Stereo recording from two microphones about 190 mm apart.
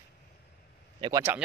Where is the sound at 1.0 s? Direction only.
20° right (ahead or behind).